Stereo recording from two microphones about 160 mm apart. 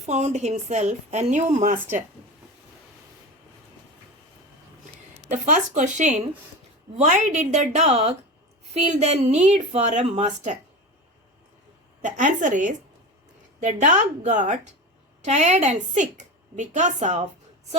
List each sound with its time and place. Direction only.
0.0 s a woman's voice: 45° right (ahead or behind)
5.3 s a woman's voice: 50° right (ahead or behind)
12.0 s a woman's voice: 50° right (ahead or behind)